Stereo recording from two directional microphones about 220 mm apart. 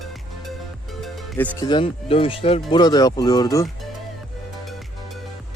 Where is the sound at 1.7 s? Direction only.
25° left (ahead or behind).